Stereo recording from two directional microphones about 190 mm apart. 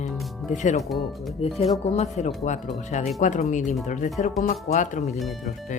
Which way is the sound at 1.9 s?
35° left (ahead or behind).